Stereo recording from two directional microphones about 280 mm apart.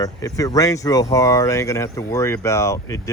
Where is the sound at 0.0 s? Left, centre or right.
Centre.